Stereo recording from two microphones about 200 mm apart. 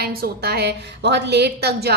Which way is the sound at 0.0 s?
50° right (ahead or behind).